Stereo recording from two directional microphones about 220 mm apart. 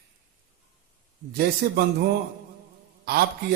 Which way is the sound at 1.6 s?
45° right (ahead or behind).